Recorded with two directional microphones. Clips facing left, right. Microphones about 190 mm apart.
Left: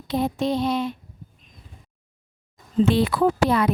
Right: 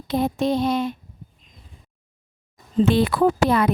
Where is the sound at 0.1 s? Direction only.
50° right (ahead or behind).